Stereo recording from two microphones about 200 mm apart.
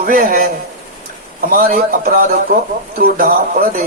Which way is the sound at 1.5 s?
45° right (ahead or behind).